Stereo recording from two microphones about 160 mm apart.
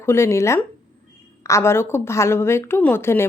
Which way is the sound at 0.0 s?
15° left (ahead or behind).